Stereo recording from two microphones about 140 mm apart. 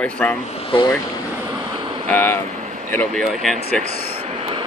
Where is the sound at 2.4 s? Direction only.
55° right (ahead or behind).